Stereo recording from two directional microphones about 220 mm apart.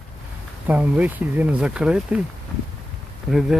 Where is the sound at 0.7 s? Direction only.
5° right (ahead or behind).